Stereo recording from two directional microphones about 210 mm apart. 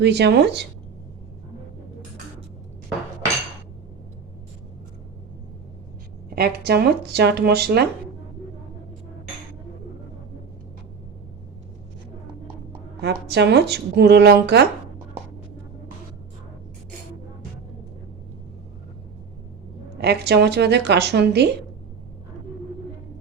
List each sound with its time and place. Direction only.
0.0 s speech: 55° right (ahead or behind)
6.3 s speech: 50° right (ahead or behind)
13.0 s speech: 50° right (ahead or behind)
20.0 s speech: 50° right (ahead or behind)